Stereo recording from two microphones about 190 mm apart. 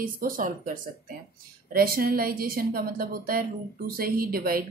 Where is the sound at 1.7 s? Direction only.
50° right (ahead or behind).